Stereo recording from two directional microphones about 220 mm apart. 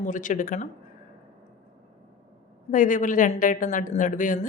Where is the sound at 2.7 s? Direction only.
35° left (ahead or behind).